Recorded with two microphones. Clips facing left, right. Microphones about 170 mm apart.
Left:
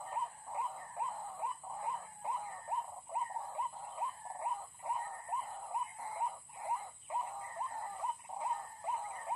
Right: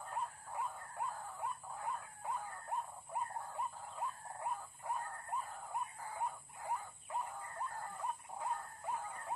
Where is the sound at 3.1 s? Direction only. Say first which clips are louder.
Left 2 dB; 20° left (ahead or behind).